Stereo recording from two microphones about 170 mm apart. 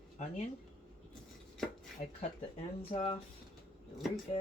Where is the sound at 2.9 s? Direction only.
35° left (ahead or behind).